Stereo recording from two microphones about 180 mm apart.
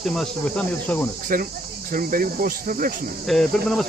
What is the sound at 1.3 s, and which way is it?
Speech, 50° right (ahead or behind).